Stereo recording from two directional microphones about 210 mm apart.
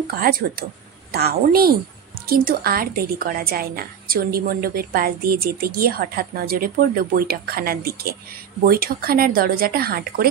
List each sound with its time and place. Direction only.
0.1 s a woman's voice: 45° right (ahead or behind)